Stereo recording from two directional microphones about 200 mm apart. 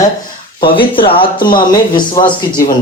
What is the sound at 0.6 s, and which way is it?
Speech, 25° left (ahead or behind).